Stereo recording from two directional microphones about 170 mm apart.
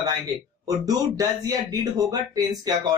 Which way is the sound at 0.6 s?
20° right (ahead or behind).